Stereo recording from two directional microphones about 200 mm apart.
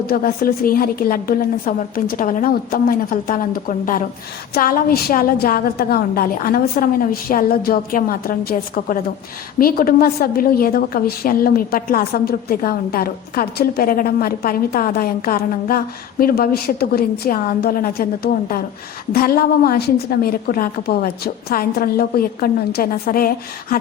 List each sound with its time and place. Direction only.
0.1 s a woman's voice: 45° left (ahead or behind)